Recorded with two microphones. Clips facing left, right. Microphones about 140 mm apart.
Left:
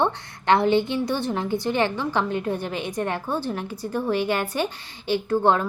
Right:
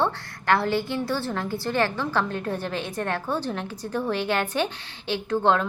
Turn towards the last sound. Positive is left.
turn(degrees=10)  # may be behind; listen again after turning